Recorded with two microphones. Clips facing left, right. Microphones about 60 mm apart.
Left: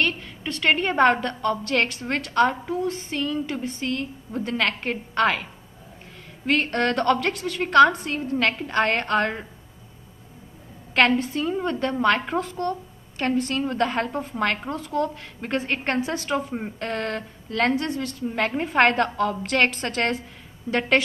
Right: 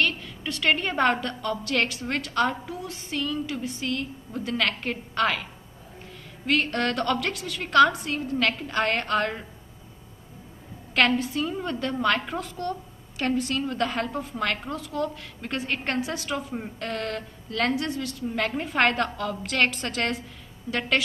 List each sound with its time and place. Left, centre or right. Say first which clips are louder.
0.0 s a woman's voice: left 1 dB; left
11.3 s a woman's voice: left 3 dB; centre
11.7 s a woman's voice: left 3 dB; left
13.6 s a woman's voice: left 3 dB; left
18.3 s a woman's voice: left 4 dB; left
20.7 s a woman's voice: left 5 dB; centre